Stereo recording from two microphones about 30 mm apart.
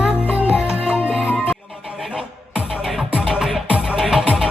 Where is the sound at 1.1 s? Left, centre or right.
Right.